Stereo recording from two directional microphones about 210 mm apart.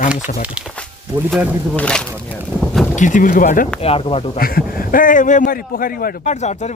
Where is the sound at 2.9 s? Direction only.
35° left (ahead or behind).